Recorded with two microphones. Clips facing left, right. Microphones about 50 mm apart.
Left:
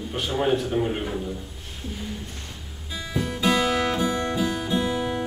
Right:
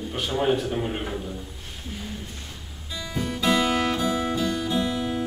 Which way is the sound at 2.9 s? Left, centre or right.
Centre.